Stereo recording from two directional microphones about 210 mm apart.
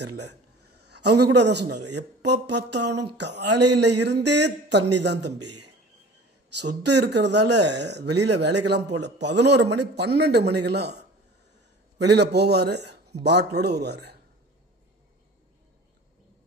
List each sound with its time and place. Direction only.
0.1 s a man's voice: 55° right (ahead or behind)
5.4 s a man's voice: 90° right
7.0 s a man's voice: 55° right (ahead or behind)